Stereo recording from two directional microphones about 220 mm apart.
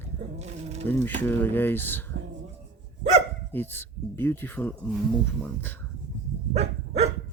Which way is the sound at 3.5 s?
10° left (ahead or behind).